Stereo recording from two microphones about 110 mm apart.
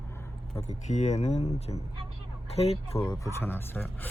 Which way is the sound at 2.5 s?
70° left (ahead or behind).